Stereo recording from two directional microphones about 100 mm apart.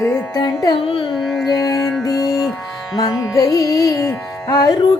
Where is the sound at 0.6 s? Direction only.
60° left (ahead or behind).